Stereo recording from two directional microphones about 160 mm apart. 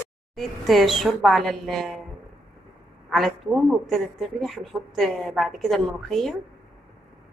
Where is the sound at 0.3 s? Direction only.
Centre (ahead or behind).